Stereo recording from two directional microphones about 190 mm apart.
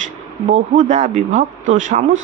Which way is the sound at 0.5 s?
40° right (ahead or behind).